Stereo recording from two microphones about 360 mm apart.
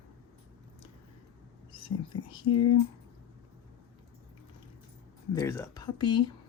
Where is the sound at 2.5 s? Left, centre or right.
Left.